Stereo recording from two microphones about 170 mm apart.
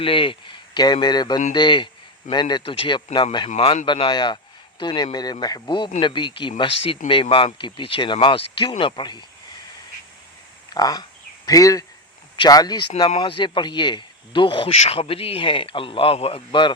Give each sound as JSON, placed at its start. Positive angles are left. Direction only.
{"t": 0.0, "sound": "speech", "side_deg": 30}
{"t": 10.7, "sound": "speech", "side_deg": 25}